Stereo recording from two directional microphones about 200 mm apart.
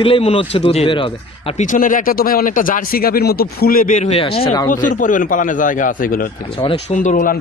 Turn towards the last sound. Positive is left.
turn(degrees=40)  # may be behind; listen again after turning